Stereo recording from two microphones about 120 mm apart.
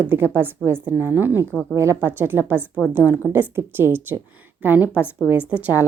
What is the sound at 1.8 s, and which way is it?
A woman's voice, 20° right (ahead or behind).